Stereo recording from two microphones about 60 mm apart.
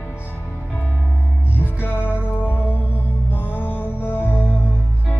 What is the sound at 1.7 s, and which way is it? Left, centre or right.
Music, left.